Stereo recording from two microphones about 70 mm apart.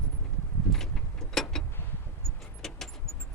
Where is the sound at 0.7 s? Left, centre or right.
Centre.